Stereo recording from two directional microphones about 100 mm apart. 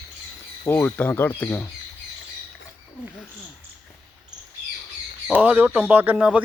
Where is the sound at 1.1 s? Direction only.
20° left (ahead or behind).